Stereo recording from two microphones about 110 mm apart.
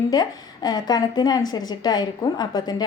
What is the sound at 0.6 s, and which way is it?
A woman's voice, 40° left (ahead or behind).